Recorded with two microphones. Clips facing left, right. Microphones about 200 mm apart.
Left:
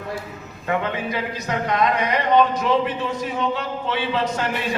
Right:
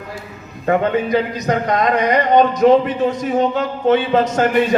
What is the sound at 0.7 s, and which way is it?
A man's voice, 40° right (ahead or behind).